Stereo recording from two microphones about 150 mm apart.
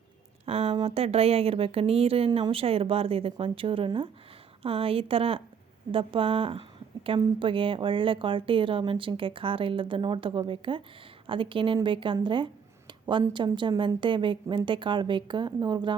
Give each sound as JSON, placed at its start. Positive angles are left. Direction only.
{"t": 0.4, "sound": "a woman's voice", "side_deg": -40}
{"t": 12.9, "sound": "a sound", "side_deg": -30}
{"t": 13.3, "sound": "a woman's voice", "side_deg": -30}